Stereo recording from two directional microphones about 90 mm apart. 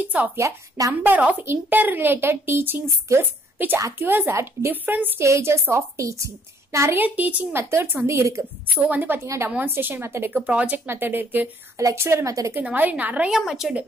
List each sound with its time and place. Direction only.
0.4 s a woman's voice: 40° right (ahead or behind)
1.0 s a woman's voice: 20° right (ahead or behind)
5.2 s a woman's voice: 30° right (ahead or behind)
8.7 s a woman's voice: 20° right (ahead or behind)
11.7 s a woman's voice: 30° right (ahead or behind)
12.5 s a woman's voice: 20° right (ahead or behind)